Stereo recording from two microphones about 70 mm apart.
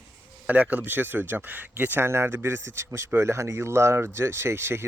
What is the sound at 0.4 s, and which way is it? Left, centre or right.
Speech, right.